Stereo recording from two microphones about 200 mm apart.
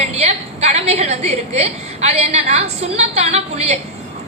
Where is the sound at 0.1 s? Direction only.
30° right (ahead or behind).